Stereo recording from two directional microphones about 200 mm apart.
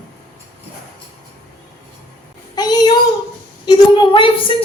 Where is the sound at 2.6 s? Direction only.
20° left (ahead or behind).